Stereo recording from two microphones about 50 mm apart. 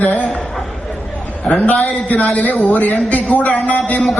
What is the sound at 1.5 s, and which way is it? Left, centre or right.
Speech, centre.